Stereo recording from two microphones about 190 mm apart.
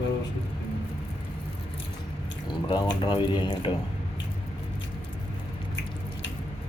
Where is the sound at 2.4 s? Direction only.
25° left (ahead or behind).